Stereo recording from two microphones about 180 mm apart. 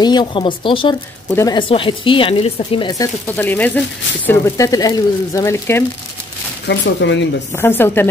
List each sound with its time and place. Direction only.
0.0 s speech: 25° left (ahead or behind)
6.7 s speech: 80° left
7.5 s speech: 15° left (ahead or behind)